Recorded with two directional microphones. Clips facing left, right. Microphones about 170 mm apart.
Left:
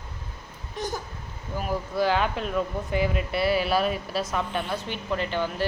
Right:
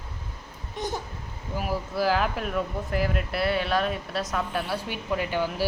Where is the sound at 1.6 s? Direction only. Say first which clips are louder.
Left 1 dB; 5° right (ahead or behind).